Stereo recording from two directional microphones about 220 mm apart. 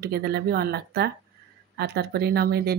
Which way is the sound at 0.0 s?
45° right (ahead or behind).